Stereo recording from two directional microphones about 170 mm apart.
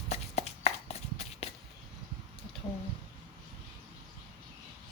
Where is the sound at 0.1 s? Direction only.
40° left (ahead or behind).